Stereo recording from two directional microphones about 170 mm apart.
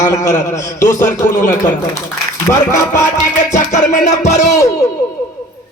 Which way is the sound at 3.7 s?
45° left (ahead or behind).